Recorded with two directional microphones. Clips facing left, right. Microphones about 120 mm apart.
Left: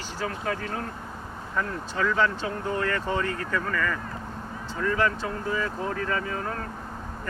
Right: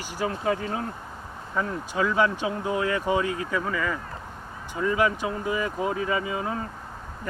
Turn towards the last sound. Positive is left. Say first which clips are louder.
# right 2 dB
turn(degrees=-10)  # may be behind; listen again after turning